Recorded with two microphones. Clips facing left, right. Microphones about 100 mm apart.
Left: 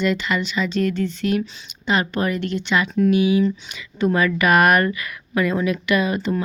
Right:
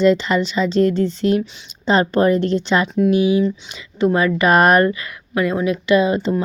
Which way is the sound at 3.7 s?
25° right (ahead or behind).